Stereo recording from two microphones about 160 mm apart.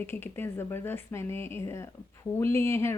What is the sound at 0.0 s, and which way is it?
A woman's voice, 15° left (ahead or behind).